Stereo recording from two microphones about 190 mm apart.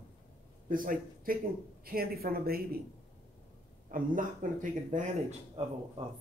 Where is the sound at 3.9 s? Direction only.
45° right (ahead or behind).